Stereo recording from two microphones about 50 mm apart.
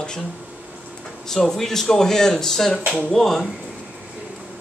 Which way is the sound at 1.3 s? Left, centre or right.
Centre.